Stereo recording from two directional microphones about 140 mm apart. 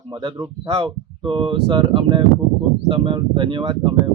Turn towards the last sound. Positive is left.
turn(degrees=-35)  # may be behind; listen again after turning